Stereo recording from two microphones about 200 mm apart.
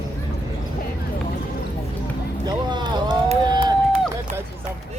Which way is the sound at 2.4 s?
20° right (ahead or behind).